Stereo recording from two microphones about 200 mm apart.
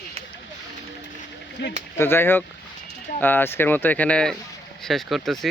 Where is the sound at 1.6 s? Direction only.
60° left (ahead or behind).